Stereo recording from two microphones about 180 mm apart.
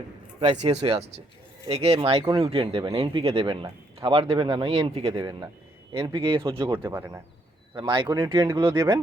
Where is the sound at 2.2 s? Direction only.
20° right (ahead or behind).